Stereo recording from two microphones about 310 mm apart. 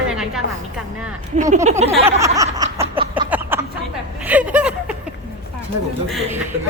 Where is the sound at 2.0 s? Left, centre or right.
Centre.